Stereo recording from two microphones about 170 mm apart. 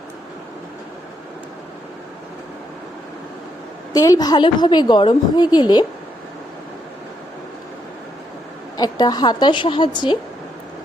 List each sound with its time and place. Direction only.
3.9 s a woman's voice: 20° left (ahead or behind)
8.8 s a woman's voice: 25° left (ahead or behind)